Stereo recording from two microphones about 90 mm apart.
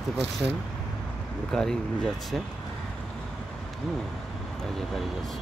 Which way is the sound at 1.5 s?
5° left (ahead or behind).